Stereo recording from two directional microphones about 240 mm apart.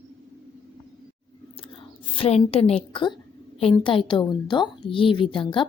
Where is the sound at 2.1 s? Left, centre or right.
Left.